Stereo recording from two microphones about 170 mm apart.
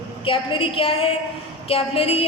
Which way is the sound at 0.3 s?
30° left (ahead or behind).